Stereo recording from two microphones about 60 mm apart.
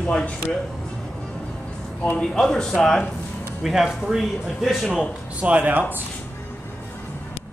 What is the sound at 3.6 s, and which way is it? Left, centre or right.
A man's voice, centre.